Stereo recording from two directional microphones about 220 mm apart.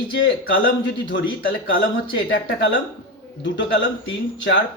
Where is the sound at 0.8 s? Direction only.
55° left (ahead or behind).